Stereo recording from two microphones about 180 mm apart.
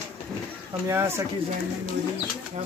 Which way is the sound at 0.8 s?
15° right (ahead or behind).